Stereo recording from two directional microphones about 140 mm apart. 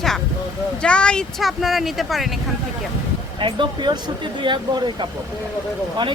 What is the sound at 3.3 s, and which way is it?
Speech, 35° right (ahead or behind).